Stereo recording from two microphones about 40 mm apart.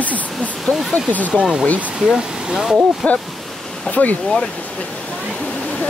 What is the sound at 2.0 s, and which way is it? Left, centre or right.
Speech, centre.